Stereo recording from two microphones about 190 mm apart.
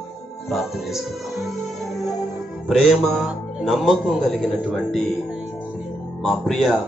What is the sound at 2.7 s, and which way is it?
Speech, centre (ahead or behind).